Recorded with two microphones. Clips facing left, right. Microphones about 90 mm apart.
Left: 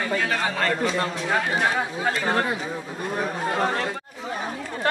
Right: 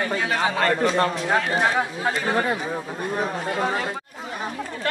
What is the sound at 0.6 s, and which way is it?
Speech, 45° right (ahead or behind).